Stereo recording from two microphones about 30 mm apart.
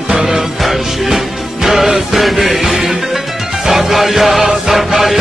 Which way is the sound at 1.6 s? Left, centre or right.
Centre.